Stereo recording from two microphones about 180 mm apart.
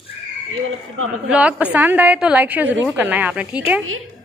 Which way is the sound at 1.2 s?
5° right (ahead or behind).